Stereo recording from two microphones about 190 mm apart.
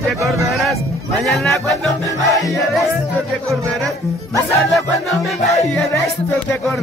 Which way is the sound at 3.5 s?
15° right (ahead or behind).